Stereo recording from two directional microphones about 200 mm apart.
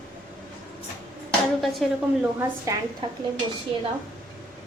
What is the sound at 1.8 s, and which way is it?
Speech, centre (ahead or behind).